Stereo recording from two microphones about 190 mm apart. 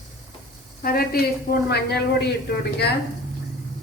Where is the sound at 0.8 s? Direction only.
50° left (ahead or behind).